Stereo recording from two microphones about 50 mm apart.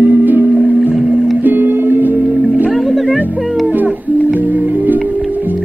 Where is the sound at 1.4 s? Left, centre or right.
Right.